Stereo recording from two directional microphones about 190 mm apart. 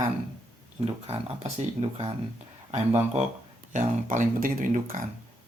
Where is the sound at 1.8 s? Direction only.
30° right (ahead or behind).